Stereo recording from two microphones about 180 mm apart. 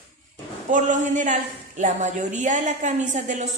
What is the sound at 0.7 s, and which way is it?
A woman's voice, 45° right (ahead or behind).